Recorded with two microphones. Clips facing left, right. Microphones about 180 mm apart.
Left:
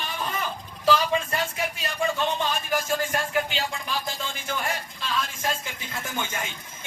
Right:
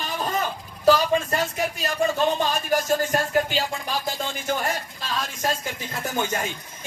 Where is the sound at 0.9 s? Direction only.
40° right (ahead or behind).